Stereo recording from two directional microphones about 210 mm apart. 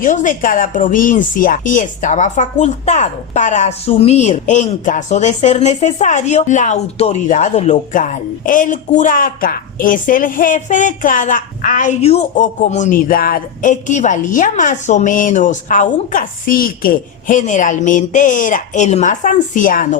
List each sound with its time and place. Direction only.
0.0 s a woman's voice: 40° left (ahead or behind)